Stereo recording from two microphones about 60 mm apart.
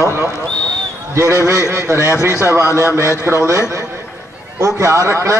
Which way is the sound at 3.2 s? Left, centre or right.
Right.